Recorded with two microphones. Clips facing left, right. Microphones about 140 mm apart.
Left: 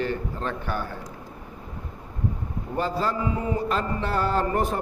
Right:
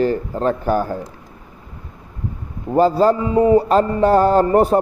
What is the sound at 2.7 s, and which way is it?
Speech, 35° right (ahead or behind).